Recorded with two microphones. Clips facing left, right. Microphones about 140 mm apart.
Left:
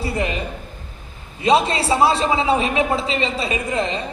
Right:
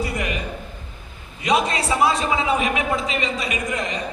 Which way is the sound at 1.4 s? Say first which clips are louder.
Left 4 dB; 30° left (ahead or behind).